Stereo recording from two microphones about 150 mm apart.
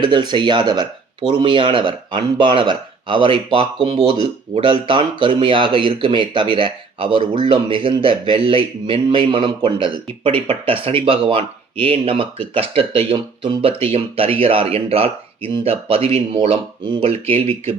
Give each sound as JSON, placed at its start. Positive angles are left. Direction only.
{"t": 0.0, "sound": "speech", "side_deg": -30}